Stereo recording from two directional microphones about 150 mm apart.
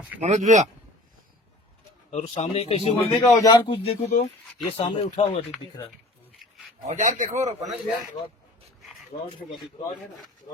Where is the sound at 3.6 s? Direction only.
35° left (ahead or behind).